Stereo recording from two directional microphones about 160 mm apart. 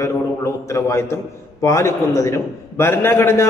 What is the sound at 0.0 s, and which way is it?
A man's voice, 20° left (ahead or behind).